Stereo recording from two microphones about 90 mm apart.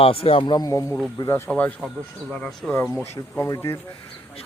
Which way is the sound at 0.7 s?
30° left (ahead or behind).